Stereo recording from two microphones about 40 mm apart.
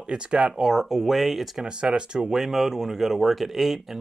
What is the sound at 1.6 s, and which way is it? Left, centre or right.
Speech, right.